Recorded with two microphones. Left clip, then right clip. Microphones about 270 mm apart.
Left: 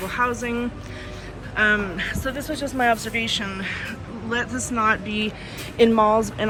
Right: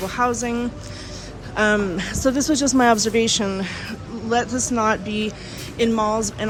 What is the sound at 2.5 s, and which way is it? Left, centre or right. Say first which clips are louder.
A woman's voice: right 3 dB; right.